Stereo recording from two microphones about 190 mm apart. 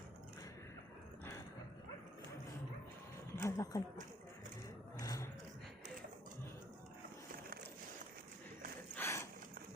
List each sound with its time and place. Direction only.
3.3 s speech: 15° left (ahead or behind)
4.9 s vehicle: 15° left (ahead or behind)
9.0 s a sound: 15° left (ahead or behind)